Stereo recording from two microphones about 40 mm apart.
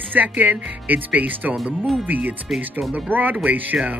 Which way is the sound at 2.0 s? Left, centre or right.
Right.